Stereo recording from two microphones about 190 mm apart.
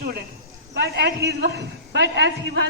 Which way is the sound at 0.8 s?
60° right (ahead or behind).